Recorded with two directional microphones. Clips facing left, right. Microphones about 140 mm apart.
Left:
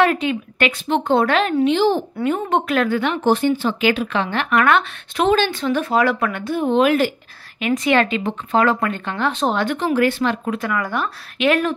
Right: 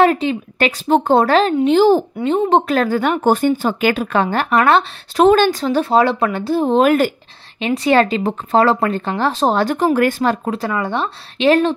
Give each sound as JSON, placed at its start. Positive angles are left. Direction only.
{"t": 0.0, "sound": "speech", "side_deg": -30}
{"t": 2.1, "sound": "speech", "side_deg": -25}